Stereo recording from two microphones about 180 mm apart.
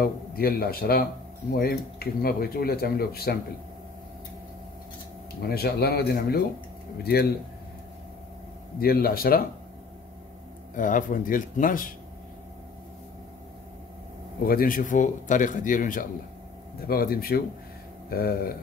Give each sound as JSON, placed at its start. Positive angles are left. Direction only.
{"t": 0.0, "sound": "speech", "side_deg": 55}
{"t": 5.5, "sound": "speech", "side_deg": 60}
{"t": 8.7, "sound": "speech", "side_deg": 55}
{"t": 10.8, "sound": "speech", "side_deg": 45}
{"t": 14.4, "sound": "speech", "side_deg": 55}